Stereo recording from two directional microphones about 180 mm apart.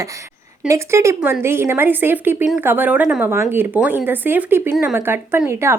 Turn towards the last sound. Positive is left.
turn(degrees=-15)  # may be behind; listen again after turning